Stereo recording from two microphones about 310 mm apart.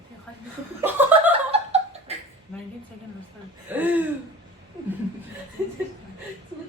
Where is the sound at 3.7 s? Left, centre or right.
Centre.